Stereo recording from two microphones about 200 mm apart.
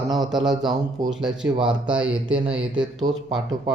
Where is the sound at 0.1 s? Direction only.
Centre (ahead or behind).